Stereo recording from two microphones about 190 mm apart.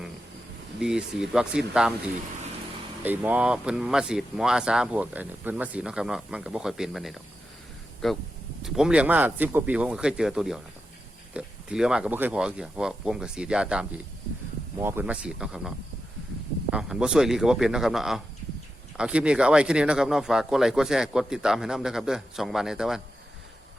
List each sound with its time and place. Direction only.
0.8 s speech: 5° right (ahead or behind)
3.0 s speech: 10° right (ahead or behind)
16.7 s speech: 5° right (ahead or behind)